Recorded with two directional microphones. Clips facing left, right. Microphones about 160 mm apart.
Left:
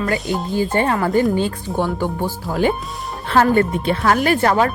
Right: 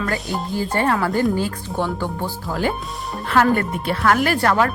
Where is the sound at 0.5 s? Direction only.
20° left (ahead or behind).